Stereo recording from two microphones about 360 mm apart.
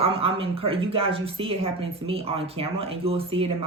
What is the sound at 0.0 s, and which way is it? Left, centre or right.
A woman's voice, centre.